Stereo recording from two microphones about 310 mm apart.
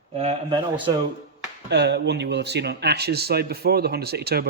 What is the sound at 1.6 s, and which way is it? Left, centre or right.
Speech, right.